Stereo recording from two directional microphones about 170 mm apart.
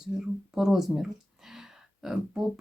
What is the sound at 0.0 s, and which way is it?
Speech, centre (ahead or behind).